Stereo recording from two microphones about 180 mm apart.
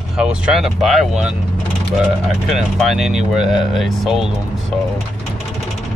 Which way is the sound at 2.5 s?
Centre (ahead or behind).